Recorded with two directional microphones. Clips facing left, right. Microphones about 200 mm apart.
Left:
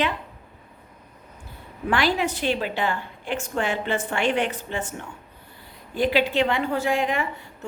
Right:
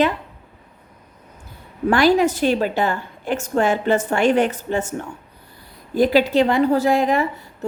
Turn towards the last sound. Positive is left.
turn(degrees=-40)  # may be behind; listen again after turning